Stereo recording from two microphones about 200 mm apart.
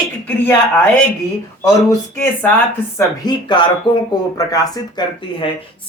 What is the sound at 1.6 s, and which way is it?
Speech, 15° left (ahead or behind).